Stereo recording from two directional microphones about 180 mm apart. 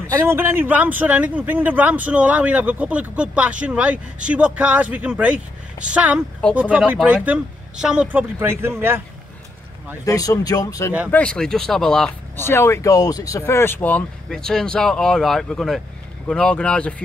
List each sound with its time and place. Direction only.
0.2 s speech: 15° right (ahead or behind)
10.0 s speech: 20° left (ahead or behind)
11.1 s speech: 5° left (ahead or behind)